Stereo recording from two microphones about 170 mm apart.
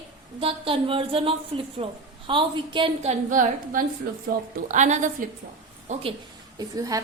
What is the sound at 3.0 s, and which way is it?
A woman's voice, 50° right (ahead or behind).